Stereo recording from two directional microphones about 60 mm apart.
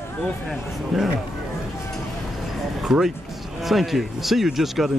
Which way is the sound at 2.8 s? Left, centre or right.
Centre.